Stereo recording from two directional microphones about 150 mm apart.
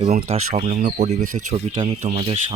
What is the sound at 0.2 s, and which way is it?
Speech, 45° right (ahead or behind).